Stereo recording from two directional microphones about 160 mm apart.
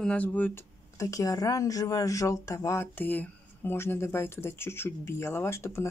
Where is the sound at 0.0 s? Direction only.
10° left (ahead or behind).